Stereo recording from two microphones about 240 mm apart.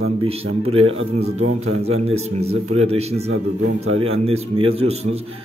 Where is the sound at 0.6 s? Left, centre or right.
Right.